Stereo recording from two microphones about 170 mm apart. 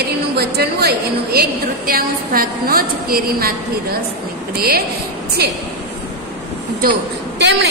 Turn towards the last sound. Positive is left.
turn(degrees=-75)  # may be behind; listen again after turning